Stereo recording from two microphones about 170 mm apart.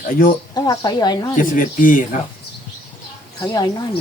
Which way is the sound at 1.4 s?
55° left (ahead or behind).